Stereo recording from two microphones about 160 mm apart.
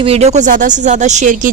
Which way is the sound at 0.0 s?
40° right (ahead or behind).